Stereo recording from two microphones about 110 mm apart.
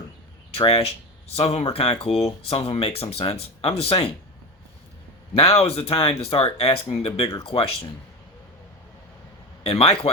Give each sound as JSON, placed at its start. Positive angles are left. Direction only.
{"t": 0.5, "sound": "speech", "side_deg": 60}
{"t": 5.3, "sound": "speech", "side_deg": 65}
{"t": 9.6, "sound": "speech", "side_deg": 55}